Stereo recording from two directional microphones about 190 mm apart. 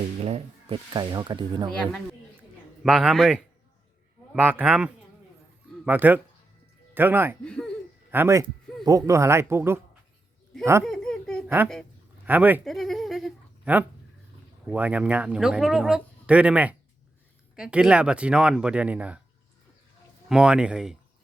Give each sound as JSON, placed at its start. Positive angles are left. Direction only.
{"t": 0.2, "sound": "speech", "side_deg": -35}
{"t": 2.8, "sound": "speech", "side_deg": 0}
{"t": 7.4, "sound": "speech", "side_deg": 5}
{"t": 8.1, "sound": "speech", "side_deg": -15}
{"t": 10.8, "sound": "a sound", "side_deg": 5}
{"t": 11.4, "sound": "a woman's voice", "side_deg": -10}
{"t": 12.6, "sound": "a sound", "side_deg": 0}
{"t": 14.7, "sound": "speech", "side_deg": -5}
{"t": 20.2, "sound": "speech", "side_deg": -5}